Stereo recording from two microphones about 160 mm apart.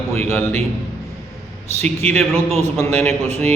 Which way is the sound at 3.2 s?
45° right (ahead or behind).